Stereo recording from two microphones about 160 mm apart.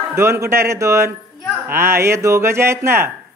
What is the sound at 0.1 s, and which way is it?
Speech, 15° right (ahead or behind).